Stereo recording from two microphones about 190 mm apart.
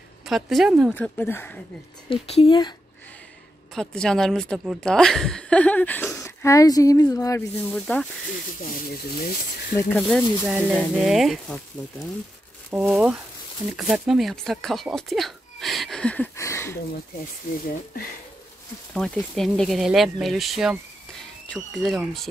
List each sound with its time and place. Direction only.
0.2 s a woman's voice: centre (ahead or behind)
0.9 s speech: 10° left (ahead or behind)
2.0 s speech: 30° left (ahead or behind)
3.7 s a woman's voice: 5° left (ahead or behind)
6.4 s speech: 15° left (ahead or behind)
7.7 s a woman's voice: centre (ahead or behind)
8.5 s speech: 50° left (ahead or behind)
10.0 s a woman's voice: 5° right (ahead or behind)
12.7 s speech: 5° right (ahead or behind); by 16.7 s 15° left (ahead or behind)
18.9 s a woman's voice: centre (ahead or behind)